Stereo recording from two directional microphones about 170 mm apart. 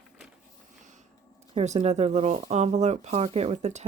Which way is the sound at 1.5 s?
40° right (ahead or behind).